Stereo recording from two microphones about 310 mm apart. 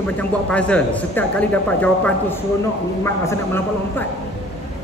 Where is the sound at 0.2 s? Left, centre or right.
Centre.